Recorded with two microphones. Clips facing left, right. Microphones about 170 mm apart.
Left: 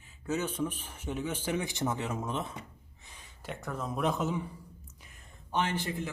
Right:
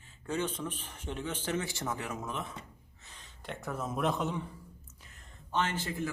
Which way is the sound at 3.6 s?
5° right (ahead or behind).